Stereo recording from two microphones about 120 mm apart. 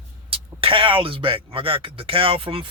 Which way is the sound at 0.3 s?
50° right (ahead or behind).